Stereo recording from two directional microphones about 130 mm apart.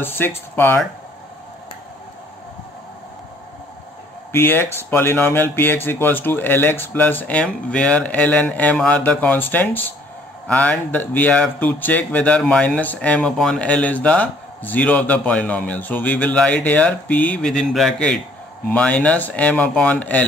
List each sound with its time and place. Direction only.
0.6 s speech: 20° left (ahead or behind)
4.3 s speech: 15° left (ahead or behind)